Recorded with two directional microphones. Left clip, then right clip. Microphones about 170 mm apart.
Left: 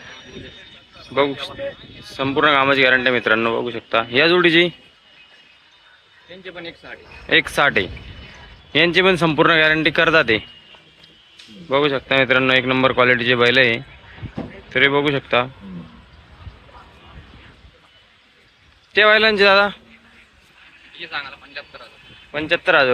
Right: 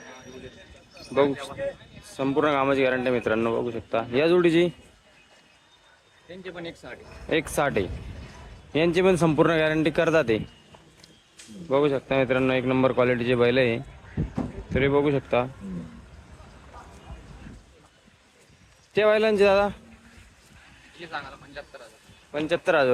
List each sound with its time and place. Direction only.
1.1 s speech: 15° right (ahead or behind)
6.4 s speech: 90° right
7.3 s speech: 10° right (ahead or behind)
11.7 s speech: 10° right (ahead or behind)
18.9 s speech: 10° right (ahead or behind)
22.3 s speech: 15° right (ahead or behind)